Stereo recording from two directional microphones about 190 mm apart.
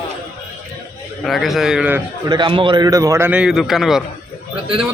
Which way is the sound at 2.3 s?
25° right (ahead or behind).